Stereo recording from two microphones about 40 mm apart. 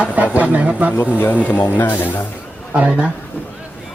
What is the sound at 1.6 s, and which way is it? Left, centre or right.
Speech, left.